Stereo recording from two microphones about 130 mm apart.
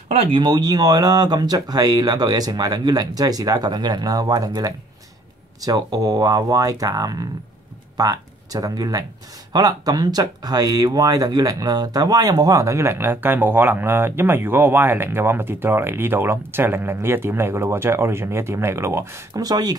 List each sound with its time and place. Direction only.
0.1 s speech: 50° right (ahead or behind)
0.4 s speech: 30° right (ahead or behind)